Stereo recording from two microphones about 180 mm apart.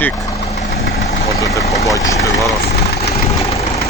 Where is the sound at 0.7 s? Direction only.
60° left (ahead or behind).